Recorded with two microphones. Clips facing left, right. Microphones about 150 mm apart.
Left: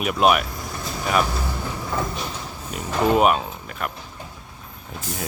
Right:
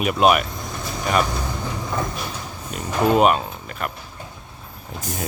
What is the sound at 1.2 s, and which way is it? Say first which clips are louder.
Vehicle: right 1 dB; 15° right (ahead or behind).